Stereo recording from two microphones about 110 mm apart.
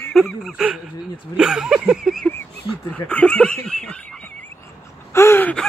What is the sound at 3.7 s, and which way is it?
Fowl, 5° left (ahead or behind).